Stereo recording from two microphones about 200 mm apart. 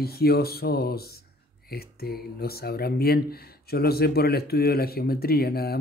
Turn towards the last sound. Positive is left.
turn(degrees=50)  # may be behind; listen again after turning